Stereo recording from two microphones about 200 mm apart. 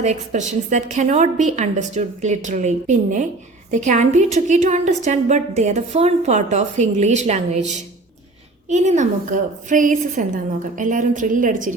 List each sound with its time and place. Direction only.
0.0 s a woman's voice: 35° right (ahead or behind)